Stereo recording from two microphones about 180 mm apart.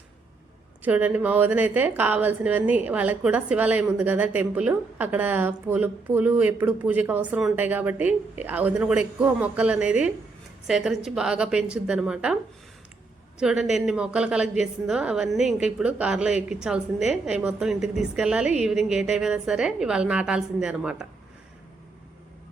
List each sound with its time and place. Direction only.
0.8 s a woman's voice: 10° right (ahead or behind)
13.4 s a woman's voice: 5° right (ahead or behind)